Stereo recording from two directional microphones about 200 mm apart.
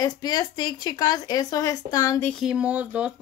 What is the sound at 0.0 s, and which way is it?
Speech, 20° left (ahead or behind).